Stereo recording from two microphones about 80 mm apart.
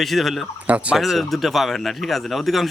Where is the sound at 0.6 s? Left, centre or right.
Centre.